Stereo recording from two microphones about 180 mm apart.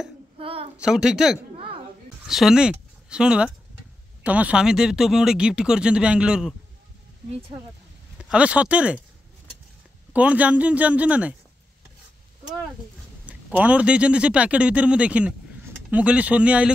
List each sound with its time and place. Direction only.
0.4 s a sound: 30° right (ahead or behind)
0.7 s speech: 5° right (ahead or behind)
8.2 s a man's voice: 5° right (ahead or behind)
10.1 s a man's voice: 10° right (ahead or behind)
13.3 s a man's voice: 10° right (ahead or behind)